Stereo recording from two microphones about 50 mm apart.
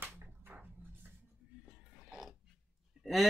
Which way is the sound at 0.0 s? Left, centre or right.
Right.